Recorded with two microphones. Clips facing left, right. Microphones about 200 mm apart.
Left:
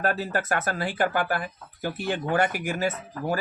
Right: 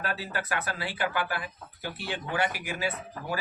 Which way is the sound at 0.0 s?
50° left (ahead or behind).